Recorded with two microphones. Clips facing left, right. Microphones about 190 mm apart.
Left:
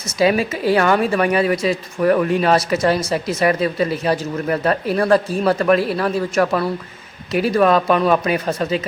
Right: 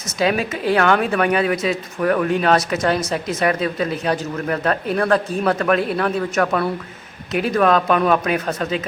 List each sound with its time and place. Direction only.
0.2 s speech: 5° left (ahead or behind)